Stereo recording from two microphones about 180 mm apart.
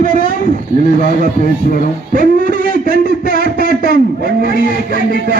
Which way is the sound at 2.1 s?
50° right (ahead or behind).